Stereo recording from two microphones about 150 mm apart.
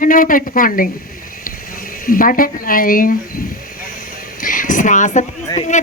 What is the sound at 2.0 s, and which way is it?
Speech, 70° left (ahead or behind).